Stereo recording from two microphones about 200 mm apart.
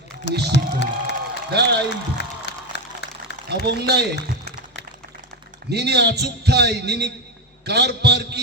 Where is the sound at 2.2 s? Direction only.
60° left (ahead or behind).